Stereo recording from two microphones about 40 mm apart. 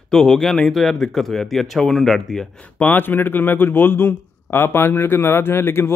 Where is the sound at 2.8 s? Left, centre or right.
Left.